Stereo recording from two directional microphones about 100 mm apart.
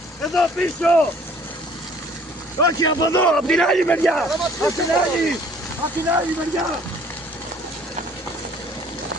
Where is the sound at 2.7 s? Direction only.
40° left (ahead or behind).